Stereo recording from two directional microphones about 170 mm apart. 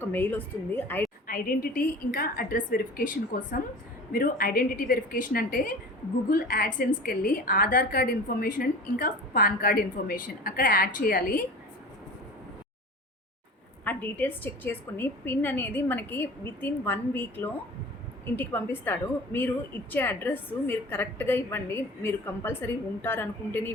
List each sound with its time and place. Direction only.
0.0 s a woman's voice: 10° left (ahead or behind)
1.3 s a woman's voice: 55° left (ahead or behind)
13.8 s a woman's voice: 10° left (ahead or behind)